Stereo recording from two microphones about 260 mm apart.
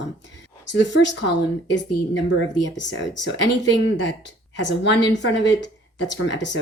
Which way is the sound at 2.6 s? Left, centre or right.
Left.